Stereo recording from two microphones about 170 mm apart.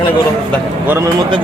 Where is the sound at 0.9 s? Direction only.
15° right (ahead or behind).